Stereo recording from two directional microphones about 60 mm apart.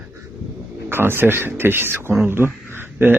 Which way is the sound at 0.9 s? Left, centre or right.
Right.